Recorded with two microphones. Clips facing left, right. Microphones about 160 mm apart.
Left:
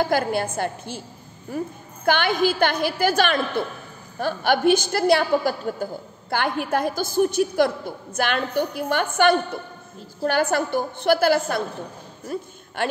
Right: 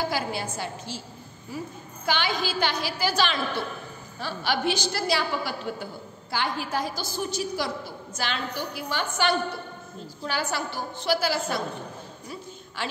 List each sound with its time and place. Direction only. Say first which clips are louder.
0.0 s a woman's voice: left 7 dB; 55° left (ahead or behind)
6.3 s a woman's voice: left 5 dB; 55° left (ahead or behind)